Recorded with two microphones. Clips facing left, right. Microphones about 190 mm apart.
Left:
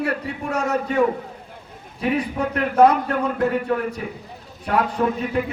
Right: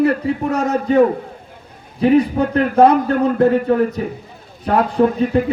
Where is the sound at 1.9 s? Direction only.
30° right (ahead or behind).